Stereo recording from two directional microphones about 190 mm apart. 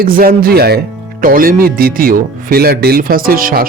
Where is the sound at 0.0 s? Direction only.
50° right (ahead or behind).